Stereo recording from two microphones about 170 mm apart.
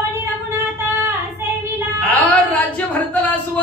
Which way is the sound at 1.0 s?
15° right (ahead or behind).